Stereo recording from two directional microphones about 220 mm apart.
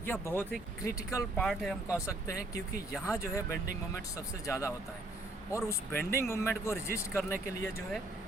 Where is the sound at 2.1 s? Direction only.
15° left (ahead or behind).